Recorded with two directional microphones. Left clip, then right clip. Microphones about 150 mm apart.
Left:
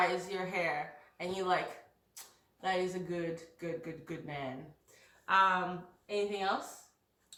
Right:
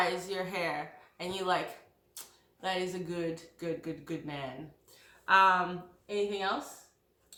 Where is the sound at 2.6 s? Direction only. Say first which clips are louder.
Even; 25° right (ahead or behind).